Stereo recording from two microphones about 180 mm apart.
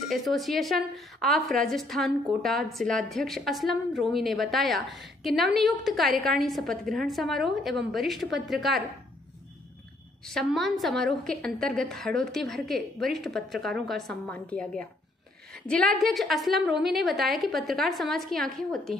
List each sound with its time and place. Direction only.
0.1 s a woman's voice: centre (ahead or behind)
10.2 s a woman's voice: centre (ahead or behind)